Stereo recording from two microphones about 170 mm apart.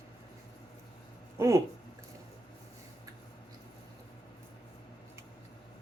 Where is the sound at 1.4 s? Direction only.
15° right (ahead or behind).